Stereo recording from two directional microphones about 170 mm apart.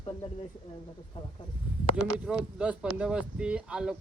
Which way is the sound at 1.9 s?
5° right (ahead or behind).